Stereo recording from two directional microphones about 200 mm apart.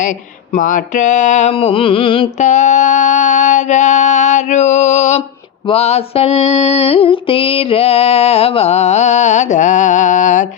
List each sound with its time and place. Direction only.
0.0 s mantra: 40° left (ahead or behind)